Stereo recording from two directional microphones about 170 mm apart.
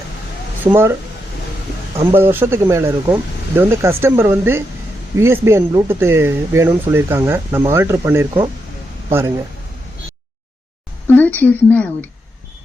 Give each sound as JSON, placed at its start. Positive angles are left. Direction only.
{"t": 0.6, "sound": "speech", "side_deg": -15}
{"t": 2.1, "sound": "speech", "side_deg": -15}
{"t": 11.3, "sound": "speech", "side_deg": 10}